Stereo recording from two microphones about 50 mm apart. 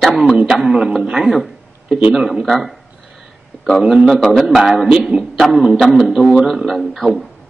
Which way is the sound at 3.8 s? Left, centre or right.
Right.